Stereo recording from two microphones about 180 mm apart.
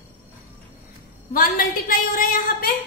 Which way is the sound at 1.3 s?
50° left (ahead or behind).